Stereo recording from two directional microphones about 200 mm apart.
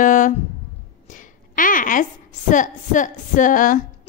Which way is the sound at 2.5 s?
40° left (ahead or behind).